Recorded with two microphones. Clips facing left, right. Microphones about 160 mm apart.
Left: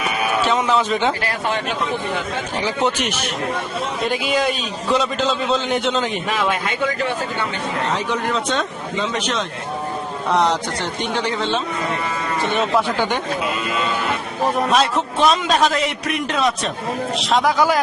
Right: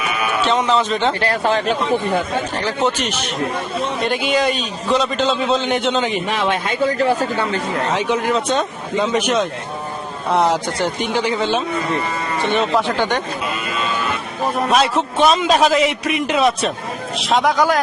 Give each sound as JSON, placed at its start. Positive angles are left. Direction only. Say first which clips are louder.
{"t": 0.4, "sound": "speech", "louder": "right 2 dB", "side_deg": 10}
{"t": 1.2, "sound": "speech", "louder": "right 5 dB", "side_deg": -30}
{"t": 2.6, "sound": "speech", "louder": "left 1 dB", "side_deg": 15}
{"t": 4.0, "sound": "a man's voice", "louder": "right 1 dB", "side_deg": 0}
{"t": 6.4, "sound": "speech", "louder": "right 3 dB", "side_deg": -30}
{"t": 8.1, "sound": "a man's voice", "louder": "right 3 dB", "side_deg": -5}
{"t": 12.5, "sound": "speech", "louder": "right 1 dB", "side_deg": 5}
{"t": 14.7, "sound": "a man's voice", "louder": "right 2 dB", "side_deg": 0}